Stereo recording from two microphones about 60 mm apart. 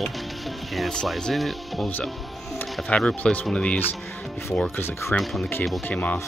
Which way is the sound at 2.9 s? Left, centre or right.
Centre.